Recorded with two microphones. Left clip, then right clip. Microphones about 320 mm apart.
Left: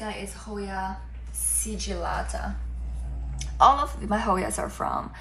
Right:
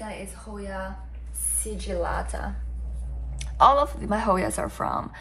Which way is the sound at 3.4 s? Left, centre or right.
Right.